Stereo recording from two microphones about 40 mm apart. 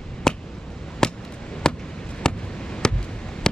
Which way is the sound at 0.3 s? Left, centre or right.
Centre.